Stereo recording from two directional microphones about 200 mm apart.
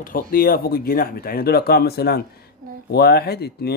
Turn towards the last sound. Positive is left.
turn(degrees=55)  # may be behind; listen again after turning